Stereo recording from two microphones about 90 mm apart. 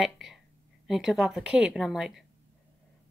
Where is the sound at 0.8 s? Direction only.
5° right (ahead or behind).